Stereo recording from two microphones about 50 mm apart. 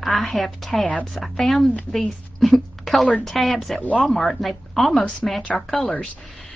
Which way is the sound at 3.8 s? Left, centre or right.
Left.